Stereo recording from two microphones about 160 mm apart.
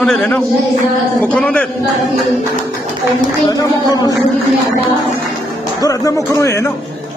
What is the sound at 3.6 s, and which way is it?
Speech, 20° left (ahead or behind).